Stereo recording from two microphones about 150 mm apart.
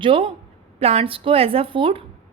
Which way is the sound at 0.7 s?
40° right (ahead or behind).